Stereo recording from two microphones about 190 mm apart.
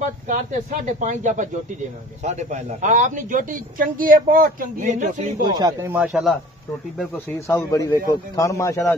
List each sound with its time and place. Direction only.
0.0 s a man's voice: 40° right (ahead or behind)
5.4 s speech: 20° right (ahead or behind); by 6.3 s 5° right (ahead or behind)
7.0 s speech: 15° left (ahead or behind)